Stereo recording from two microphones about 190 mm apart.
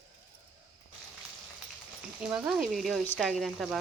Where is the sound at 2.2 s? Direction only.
5° right (ahead or behind).